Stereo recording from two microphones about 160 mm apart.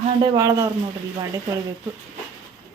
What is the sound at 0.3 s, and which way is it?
Speech, 20° right (ahead or behind).